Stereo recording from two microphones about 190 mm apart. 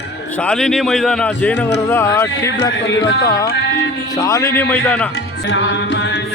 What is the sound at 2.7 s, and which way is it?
Speech, 70° left (ahead or behind).